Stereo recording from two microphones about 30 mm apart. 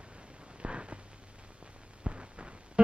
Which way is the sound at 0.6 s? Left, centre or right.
Right.